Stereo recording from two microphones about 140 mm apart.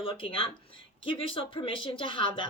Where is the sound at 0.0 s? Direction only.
40° left (ahead or behind).